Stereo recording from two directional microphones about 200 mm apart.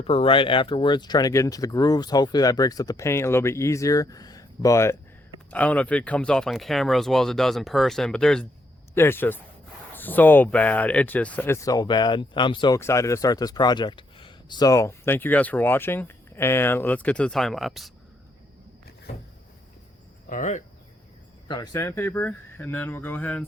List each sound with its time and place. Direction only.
0.0 s speech: 30° left (ahead or behind); by 17.9 s centre (ahead or behind)
20.3 s speech: 40° left (ahead or behind)
21.4 s speech: 20° left (ahead or behind)